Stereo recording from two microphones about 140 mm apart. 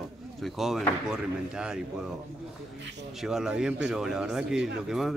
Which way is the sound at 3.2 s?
5° right (ahead or behind).